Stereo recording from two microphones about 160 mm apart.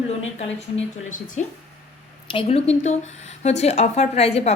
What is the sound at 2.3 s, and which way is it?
A woman's voice, 35° left (ahead or behind).